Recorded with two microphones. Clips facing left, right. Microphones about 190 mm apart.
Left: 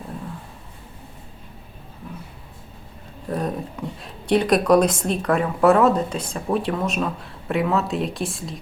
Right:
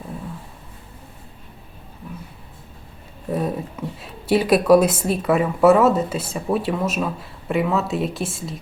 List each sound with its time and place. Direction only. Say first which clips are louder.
3.2 s speech: right 2 dB; 5° right (ahead or behind)